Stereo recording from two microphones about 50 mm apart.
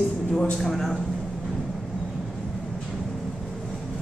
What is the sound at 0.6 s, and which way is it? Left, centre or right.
Speech, centre.